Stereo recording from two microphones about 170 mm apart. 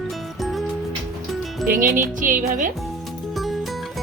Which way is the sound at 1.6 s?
55° right (ahead or behind).